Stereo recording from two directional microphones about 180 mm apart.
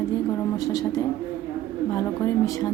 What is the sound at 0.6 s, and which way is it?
Music, 20° left (ahead or behind).